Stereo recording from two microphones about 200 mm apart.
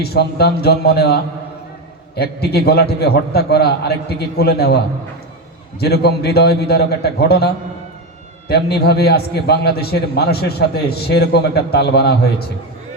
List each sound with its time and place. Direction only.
0.0 s a man's voice: 55° left (ahead or behind)
5.8 s a man's voice: 55° left (ahead or behind)